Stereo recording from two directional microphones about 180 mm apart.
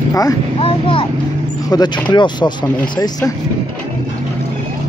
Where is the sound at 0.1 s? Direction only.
20° left (ahead or behind).